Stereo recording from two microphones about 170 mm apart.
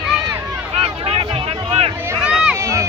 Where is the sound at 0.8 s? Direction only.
35° right (ahead or behind).